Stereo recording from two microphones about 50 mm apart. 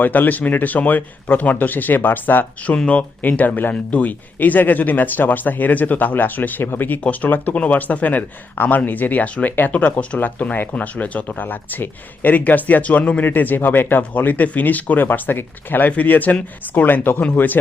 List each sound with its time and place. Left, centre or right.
0.0 s speech: left